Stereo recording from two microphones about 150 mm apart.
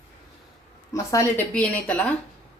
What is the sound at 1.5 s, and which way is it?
Speech, 10° left (ahead or behind).